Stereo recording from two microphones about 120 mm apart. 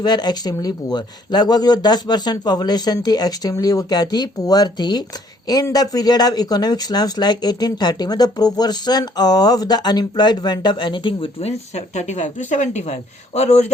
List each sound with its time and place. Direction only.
0.0 s speech: 35° left (ahead or behind); by 13.7 s 65° left (ahead or behind)